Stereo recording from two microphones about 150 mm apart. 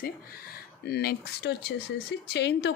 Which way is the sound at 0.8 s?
90° left.